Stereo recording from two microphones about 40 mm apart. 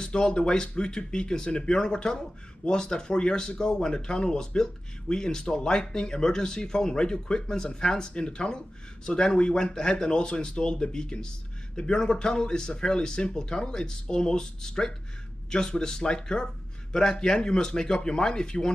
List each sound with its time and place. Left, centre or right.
0.0 s speech: left